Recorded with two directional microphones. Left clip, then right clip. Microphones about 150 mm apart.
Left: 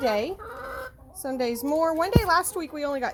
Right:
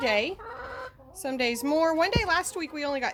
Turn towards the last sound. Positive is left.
turn(degrees=-5)  # may be behind; listen again after turning